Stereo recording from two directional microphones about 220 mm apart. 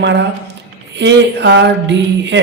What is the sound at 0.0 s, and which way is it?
Speech, 50° right (ahead or behind).